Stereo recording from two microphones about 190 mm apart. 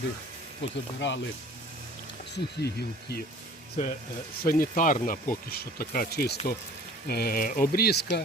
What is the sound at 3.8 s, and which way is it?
Speech, 40° left (ahead or behind).